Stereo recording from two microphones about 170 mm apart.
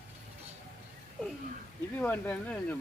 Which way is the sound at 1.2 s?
Centre (ahead or behind).